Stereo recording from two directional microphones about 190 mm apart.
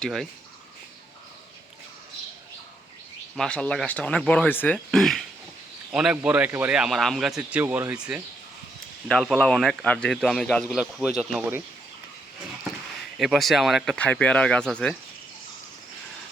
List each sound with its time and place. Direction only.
0.0 s a man's voice: centre (ahead or behind)
3.3 s a man's voice: 5° left (ahead or behind)
13.1 s a man's voice: centre (ahead or behind)